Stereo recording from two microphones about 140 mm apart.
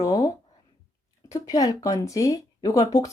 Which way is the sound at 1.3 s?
25° left (ahead or behind).